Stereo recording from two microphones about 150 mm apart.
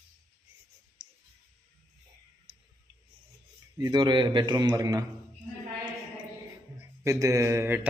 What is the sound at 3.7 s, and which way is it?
A man's voice, 30° right (ahead or behind).